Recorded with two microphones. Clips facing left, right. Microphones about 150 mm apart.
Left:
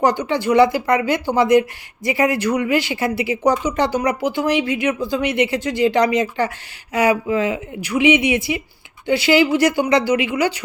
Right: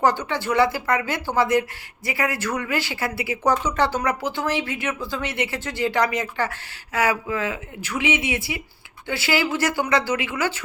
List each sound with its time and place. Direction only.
0.0 s speech: 15° left (ahead or behind)